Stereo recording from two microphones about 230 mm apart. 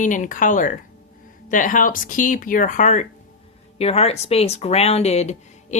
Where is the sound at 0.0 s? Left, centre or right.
Left.